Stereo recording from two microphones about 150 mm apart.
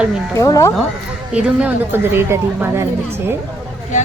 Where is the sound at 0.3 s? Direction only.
20° left (ahead or behind).